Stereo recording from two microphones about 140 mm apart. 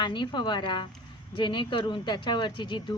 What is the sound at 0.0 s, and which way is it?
Speech, 35° left (ahead or behind).